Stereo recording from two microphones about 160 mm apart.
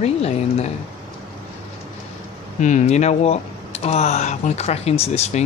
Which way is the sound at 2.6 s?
45° left (ahead or behind).